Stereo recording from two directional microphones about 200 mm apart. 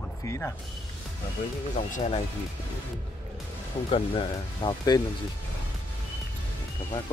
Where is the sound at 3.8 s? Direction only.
25° left (ahead or behind).